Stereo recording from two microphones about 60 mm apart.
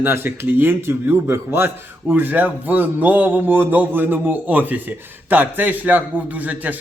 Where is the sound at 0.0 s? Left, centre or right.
Right.